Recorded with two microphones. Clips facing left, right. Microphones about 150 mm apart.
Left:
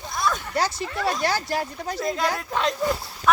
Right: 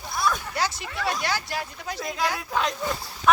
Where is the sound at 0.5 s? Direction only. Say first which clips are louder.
Left 3 dB; 35° left (ahead or behind).